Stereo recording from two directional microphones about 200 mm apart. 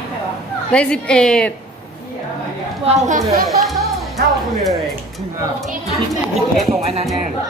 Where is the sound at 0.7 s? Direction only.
5° left (ahead or behind).